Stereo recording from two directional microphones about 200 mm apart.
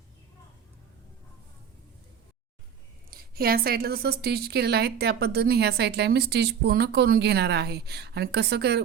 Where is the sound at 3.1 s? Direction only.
50° right (ahead or behind).